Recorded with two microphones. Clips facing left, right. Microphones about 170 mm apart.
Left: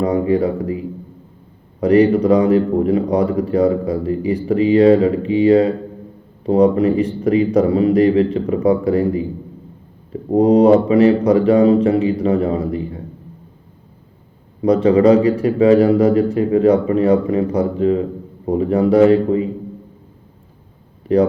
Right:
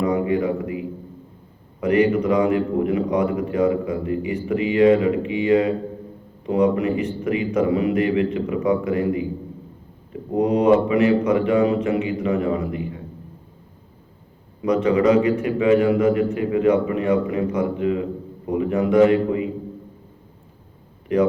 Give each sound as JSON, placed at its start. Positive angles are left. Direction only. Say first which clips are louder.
{"t": 0.0, "sound": "a man's voice", "louder": "left 4 dB", "side_deg": 35}
{"t": 1.8, "sound": "a man's voice", "louder": "left 6 dB", "side_deg": 35}
{"t": 14.6, "sound": "a man's voice", "louder": "left 6 dB", "side_deg": 30}
{"t": 21.1, "sound": "a man's voice", "louder": "left 5 dB", "side_deg": 35}